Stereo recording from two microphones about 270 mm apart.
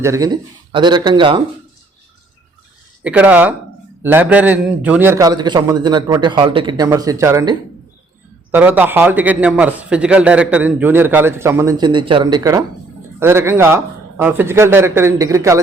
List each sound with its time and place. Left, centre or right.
0.0 s a man's voice: centre
3.0 s a man's voice: centre
8.5 s a man's voice: centre